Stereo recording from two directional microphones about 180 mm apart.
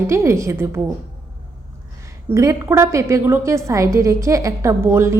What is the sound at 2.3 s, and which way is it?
A woman's voice, 15° right (ahead or behind).